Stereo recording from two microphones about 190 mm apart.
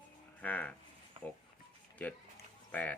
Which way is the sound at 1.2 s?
30° right (ahead or behind).